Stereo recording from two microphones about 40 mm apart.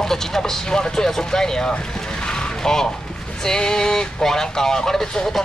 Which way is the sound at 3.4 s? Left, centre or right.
Centre.